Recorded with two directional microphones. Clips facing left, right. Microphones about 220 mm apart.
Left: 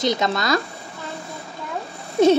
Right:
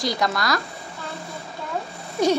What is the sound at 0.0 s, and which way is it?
Speech, 20° left (ahead or behind).